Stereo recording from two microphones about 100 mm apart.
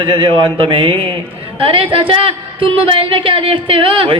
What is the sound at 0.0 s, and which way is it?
A woman's voice, 55° right (ahead or behind).